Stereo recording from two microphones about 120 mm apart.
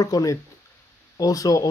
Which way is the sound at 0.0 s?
30° left (ahead or behind).